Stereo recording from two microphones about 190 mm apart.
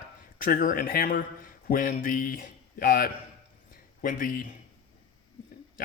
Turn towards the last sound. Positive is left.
turn(degrees=45)  # may be behind; listen again after turning